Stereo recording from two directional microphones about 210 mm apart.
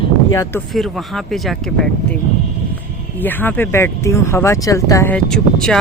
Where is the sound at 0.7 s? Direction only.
Centre (ahead or behind).